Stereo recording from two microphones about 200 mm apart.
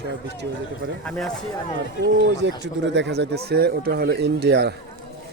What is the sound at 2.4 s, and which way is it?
Speech, 60° right (ahead or behind).